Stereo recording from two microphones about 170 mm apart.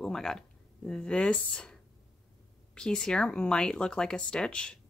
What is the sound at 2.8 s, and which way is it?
A woman's voice, 5° left (ahead or behind).